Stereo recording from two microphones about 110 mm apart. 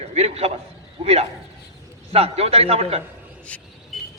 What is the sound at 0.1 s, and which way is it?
A man's voice, 75° right (ahead or behind).